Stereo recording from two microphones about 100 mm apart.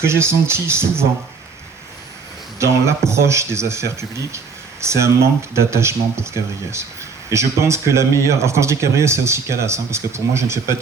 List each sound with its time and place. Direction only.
0.0 s speech: 25° right (ahead or behind)
3.1 s speech: 30° right (ahead or behind)